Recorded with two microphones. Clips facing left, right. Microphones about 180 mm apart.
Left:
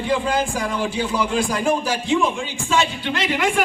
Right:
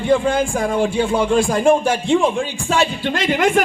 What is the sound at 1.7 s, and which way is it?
Speech, 50° right (ahead or behind).